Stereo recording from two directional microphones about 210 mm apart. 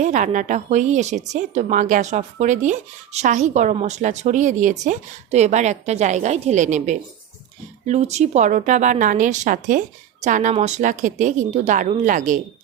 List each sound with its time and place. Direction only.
0.0 s speech: 35° right (ahead or behind)